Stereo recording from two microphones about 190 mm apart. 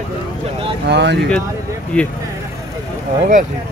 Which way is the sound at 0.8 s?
65° right (ahead or behind).